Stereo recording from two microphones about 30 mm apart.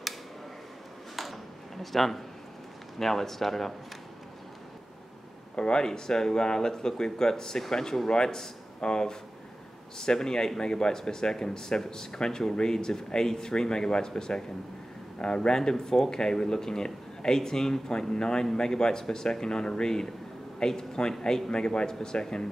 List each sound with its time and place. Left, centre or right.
1.1 s a sound: centre
3.0 s speech: centre
5.6 s speech: left